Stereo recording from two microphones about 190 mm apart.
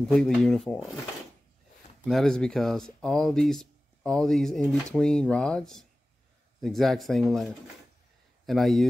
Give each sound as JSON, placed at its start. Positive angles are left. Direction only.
{"t": 0.1, "sound": "speech", "side_deg": 5}
{"t": 2.0, "sound": "speech", "side_deg": 0}